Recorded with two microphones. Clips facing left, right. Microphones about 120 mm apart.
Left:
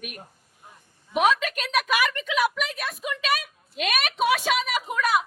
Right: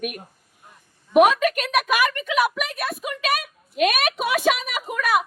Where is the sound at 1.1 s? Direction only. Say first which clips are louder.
Right 6 dB; 50° right (ahead or behind).